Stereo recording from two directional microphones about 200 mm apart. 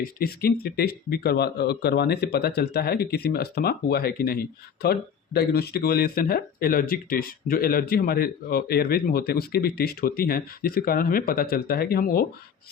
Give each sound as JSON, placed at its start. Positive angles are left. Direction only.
{"t": 0.0, "sound": "speech", "side_deg": 50}